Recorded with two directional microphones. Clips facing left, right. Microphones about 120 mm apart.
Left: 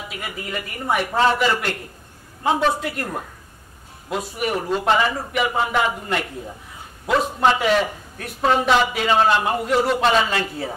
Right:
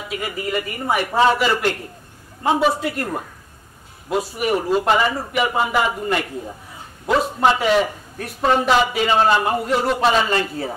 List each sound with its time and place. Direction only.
0.1 s a man's voice: centre (ahead or behind)